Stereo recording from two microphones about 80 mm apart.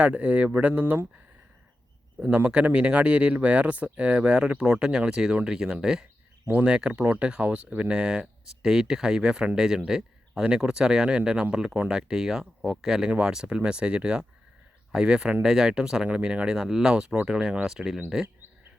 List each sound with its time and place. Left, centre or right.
0.0 s speech: centre
2.2 s speech: centre